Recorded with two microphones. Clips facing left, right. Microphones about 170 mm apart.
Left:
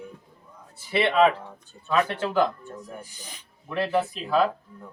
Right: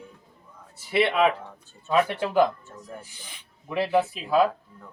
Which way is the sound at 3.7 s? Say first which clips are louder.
Right 2 dB; 10° right (ahead or behind).